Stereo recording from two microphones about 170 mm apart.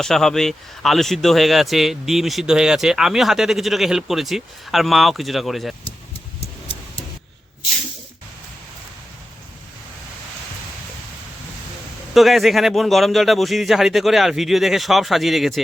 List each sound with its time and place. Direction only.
0.0 s speech: 5° left (ahead or behind)
6.4 s tick-tock: 35° left (ahead or behind)
12.1 s speech: centre (ahead or behind)